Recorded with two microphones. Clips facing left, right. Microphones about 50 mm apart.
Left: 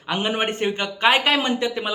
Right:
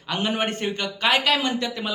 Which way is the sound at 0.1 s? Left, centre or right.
Left.